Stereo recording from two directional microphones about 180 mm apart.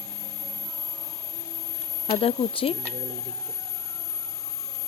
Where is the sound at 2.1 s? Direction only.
30° left (ahead or behind).